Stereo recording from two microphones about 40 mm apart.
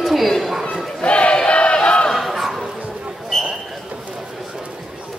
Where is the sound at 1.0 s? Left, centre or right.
Left.